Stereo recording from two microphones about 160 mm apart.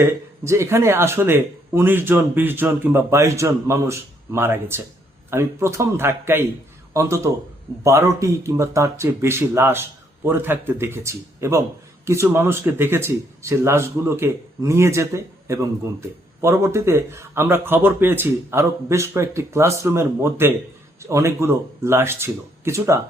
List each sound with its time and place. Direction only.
0.0 s speech: 15° right (ahead or behind)